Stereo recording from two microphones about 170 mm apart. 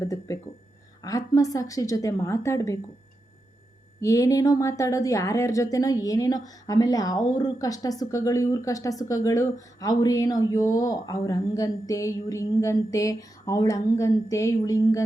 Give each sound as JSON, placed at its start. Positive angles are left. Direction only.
{"t": 0.0, "sound": "a woman's voice", "side_deg": 15}
{"t": 4.0, "sound": "a woman's voice", "side_deg": 20}